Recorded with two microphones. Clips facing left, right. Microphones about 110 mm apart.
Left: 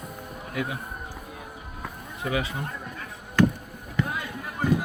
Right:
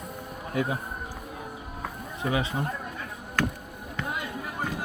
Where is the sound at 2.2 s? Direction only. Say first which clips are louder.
Right 1 dB; 25° right (ahead or behind).